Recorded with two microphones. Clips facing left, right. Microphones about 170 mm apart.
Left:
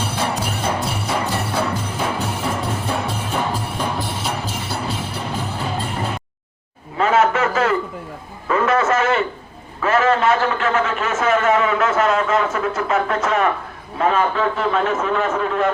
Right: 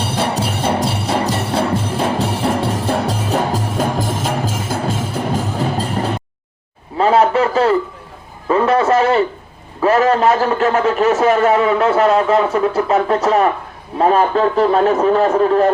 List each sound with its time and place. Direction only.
0.2 s music: 30° right (ahead or behind)
7.0 s a sound: 35° right (ahead or behind)
9.8 s a man's voice: 35° right (ahead or behind)